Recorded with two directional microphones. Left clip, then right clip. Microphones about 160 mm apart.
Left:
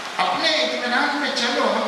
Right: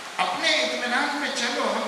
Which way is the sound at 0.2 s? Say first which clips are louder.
Left 3 dB; 10° left (ahead or behind).